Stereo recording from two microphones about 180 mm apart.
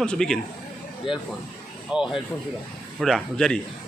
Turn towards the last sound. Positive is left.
turn(degrees=0)  # may be behind; listen again after turning